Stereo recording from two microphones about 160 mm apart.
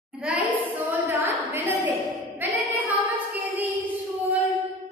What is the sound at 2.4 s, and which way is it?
Child singing, 10° right (ahead or behind).